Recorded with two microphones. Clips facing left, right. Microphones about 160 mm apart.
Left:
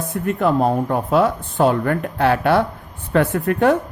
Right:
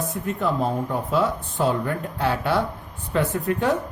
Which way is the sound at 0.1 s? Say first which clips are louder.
Left 6 dB; 60° left (ahead or behind).